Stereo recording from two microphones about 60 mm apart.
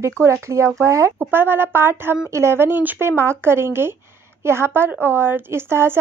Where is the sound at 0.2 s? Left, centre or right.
Right.